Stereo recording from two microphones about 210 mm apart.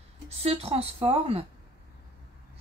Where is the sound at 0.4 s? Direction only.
30° right (ahead or behind).